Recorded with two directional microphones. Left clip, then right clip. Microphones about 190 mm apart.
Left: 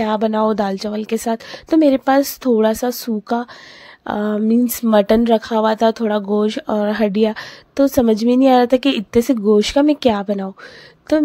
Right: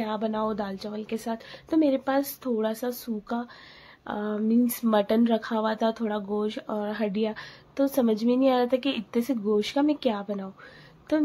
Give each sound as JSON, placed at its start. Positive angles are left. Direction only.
{"t": 0.0, "sound": "speech", "side_deg": 50}